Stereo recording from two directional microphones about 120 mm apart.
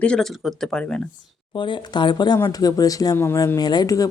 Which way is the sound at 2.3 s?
30° left (ahead or behind).